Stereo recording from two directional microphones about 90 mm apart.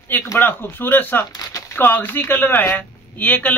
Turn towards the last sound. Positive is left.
turn(degrees=20)  # may be behind; listen again after turning